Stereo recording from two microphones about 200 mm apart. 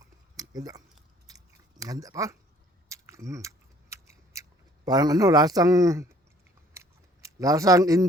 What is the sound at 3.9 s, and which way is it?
Scissors, 15° right (ahead or behind).